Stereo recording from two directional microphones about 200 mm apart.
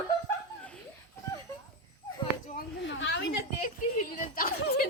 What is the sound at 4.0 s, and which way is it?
Speech, 45° left (ahead or behind).